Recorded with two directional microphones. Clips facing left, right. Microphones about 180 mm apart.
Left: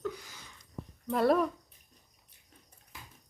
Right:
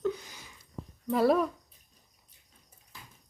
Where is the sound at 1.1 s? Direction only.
Centre (ahead or behind).